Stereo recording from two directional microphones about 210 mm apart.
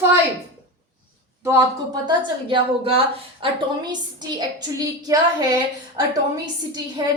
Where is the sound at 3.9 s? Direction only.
20° right (ahead or behind).